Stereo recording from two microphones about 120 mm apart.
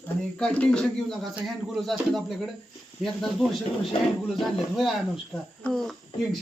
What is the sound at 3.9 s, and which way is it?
Speech, 50° left (ahead or behind).